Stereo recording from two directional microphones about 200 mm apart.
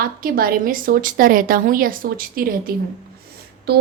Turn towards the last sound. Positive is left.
turn(degrees=-50)  # may be behind; listen again after turning